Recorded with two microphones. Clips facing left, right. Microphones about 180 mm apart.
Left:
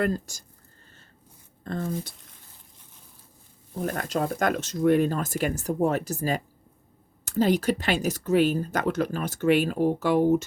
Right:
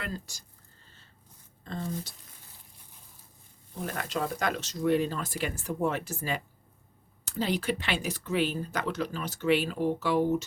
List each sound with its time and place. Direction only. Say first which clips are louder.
0.0 s speech: left 12 dB; 45° left (ahead or behind)
1.6 s speech: left 5 dB; 55° left (ahead or behind)
3.8 s speech: left 5 dB; 45° left (ahead or behind)